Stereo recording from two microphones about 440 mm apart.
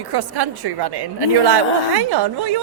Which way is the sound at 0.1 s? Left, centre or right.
Right.